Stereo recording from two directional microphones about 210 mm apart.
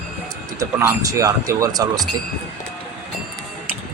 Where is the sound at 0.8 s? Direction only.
15° right (ahead or behind).